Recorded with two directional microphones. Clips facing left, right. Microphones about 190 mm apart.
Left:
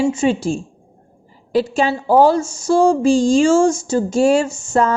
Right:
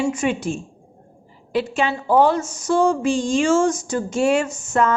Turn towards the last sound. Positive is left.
turn(degrees=35)  # may be behind; listen again after turning